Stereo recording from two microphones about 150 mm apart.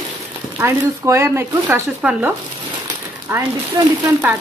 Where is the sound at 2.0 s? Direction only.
5° right (ahead or behind).